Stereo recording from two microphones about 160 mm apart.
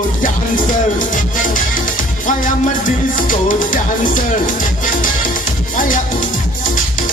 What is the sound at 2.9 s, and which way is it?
Music, 55° left (ahead or behind).